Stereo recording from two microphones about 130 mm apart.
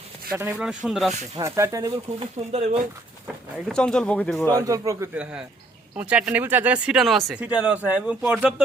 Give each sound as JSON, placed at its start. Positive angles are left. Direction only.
{"t": 0.3, "sound": "speech", "side_deg": -15}
{"t": 1.4, "sound": "speech", "side_deg": -20}
{"t": 2.1, "sound": "speech", "side_deg": -50}
{"t": 3.7, "sound": "speech", "side_deg": 5}
{"t": 4.6, "sound": "speech", "side_deg": -25}
{"t": 5.1, "sound": "speech", "side_deg": -10}